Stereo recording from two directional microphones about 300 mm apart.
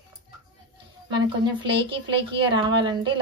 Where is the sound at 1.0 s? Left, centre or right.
Centre.